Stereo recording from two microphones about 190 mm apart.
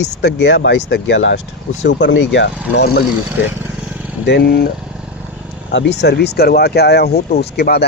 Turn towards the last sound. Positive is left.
turn(degrees=60)  # may be behind; listen again after turning